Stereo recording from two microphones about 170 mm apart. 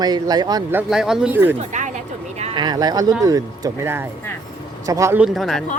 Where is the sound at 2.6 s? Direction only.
25° right (ahead or behind).